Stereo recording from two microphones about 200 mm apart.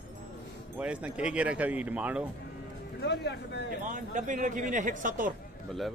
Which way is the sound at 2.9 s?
55° left (ahead or behind).